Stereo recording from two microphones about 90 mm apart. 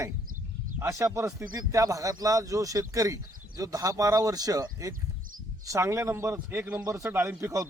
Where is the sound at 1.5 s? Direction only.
45° right (ahead or behind); by 6.6 s 30° right (ahead or behind).